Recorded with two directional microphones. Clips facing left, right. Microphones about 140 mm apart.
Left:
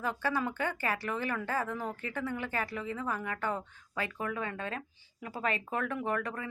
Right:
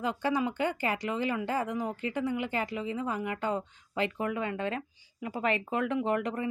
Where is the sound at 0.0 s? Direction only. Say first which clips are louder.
Right 3 dB; 15° right (ahead or behind).